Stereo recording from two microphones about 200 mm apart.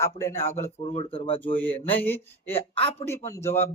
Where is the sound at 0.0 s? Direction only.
15° left (ahead or behind).